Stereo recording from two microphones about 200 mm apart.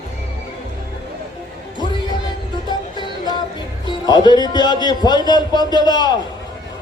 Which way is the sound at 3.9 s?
20° left (ahead or behind).